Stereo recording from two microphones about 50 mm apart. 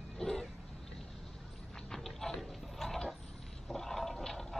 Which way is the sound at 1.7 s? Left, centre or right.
Centre.